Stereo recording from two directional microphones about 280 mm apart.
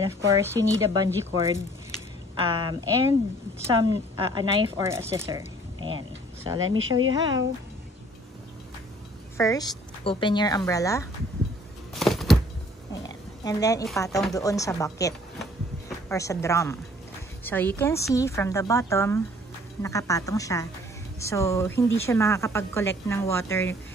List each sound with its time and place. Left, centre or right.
0.0 s speech: centre
4.3 s speech: centre
6.6 s a woman's voice: right
9.4 s speech: centre
11.9 s a sound: centre
13.4 s a woman's voice: centre